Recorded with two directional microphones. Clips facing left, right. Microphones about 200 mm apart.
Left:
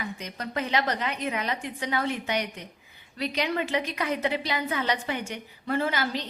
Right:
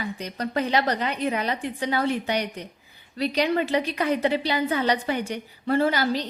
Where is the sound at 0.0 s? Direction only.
35° right (ahead or behind).